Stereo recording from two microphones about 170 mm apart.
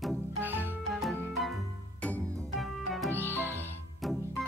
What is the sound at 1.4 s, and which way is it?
Music, centre (ahead or behind).